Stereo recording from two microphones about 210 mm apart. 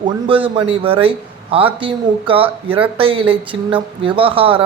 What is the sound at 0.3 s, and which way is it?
A man's voice, 25° right (ahead or behind).